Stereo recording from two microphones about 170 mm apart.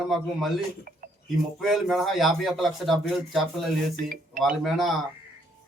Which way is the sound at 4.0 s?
55° right (ahead or behind).